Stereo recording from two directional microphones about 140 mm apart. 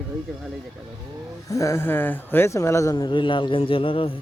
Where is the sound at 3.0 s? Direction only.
35° left (ahead or behind).